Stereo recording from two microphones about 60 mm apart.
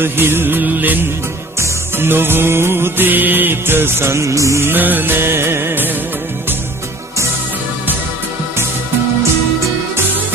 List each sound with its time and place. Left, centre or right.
0.0 s music: right
2.0 s music: right
4.6 s music: right